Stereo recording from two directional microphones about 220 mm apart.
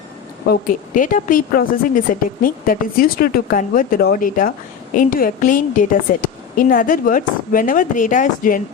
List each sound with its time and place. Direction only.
0.4 s a woman's voice: 40° left (ahead or behind)